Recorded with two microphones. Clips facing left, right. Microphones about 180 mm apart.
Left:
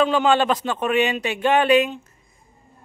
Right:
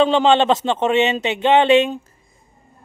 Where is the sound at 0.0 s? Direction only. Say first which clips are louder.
Right 4 dB; 25° right (ahead or behind).